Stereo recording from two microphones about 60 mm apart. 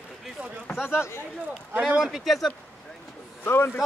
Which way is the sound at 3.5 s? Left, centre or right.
Left.